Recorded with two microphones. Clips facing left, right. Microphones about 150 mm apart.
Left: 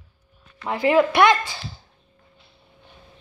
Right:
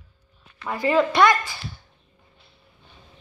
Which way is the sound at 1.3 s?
30° left (ahead or behind).